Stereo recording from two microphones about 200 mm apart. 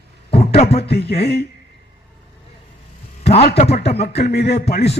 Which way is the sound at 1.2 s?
55° left (ahead or behind).